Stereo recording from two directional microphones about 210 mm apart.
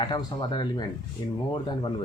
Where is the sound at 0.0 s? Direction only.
20° left (ahead or behind).